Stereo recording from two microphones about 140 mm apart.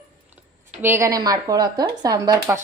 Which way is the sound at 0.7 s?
15° right (ahead or behind).